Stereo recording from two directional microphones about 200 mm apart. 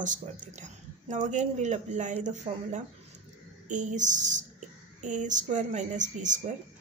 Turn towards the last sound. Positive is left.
turn(degrees=-40)  # may be behind; listen again after turning